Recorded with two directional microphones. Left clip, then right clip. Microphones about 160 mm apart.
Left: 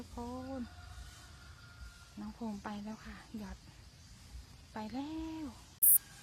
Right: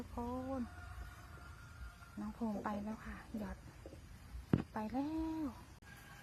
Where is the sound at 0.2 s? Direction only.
Centre (ahead or behind).